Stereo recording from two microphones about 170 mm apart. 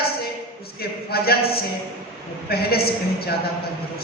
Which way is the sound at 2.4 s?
65° left (ahead or behind).